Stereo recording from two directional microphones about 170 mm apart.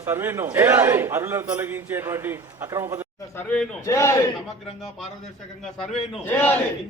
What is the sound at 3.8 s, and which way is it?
Speech, 15° left (ahead or behind).